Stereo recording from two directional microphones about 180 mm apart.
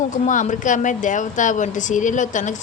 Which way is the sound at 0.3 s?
45° left (ahead or behind).